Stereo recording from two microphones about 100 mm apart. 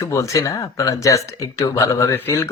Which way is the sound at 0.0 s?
30° left (ahead or behind).